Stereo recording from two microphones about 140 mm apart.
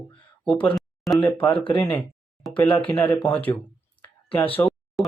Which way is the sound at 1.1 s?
15° left (ahead or behind).